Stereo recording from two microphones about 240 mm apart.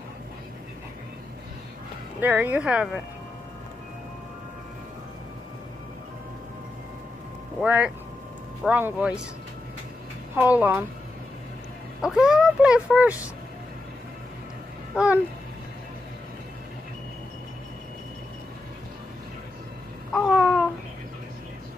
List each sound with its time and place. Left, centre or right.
2.1 s speech: centre
7.6 s speech: centre
10.3 s speech: centre
12.0 s speech: centre
20.1 s a sound: centre